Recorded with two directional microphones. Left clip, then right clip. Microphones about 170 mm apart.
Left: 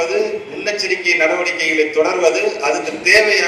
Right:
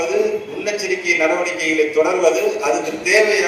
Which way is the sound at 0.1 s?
90° right.